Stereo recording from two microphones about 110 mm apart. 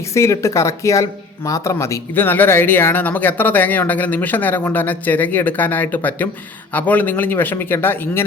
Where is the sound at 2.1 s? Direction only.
15° left (ahead or behind).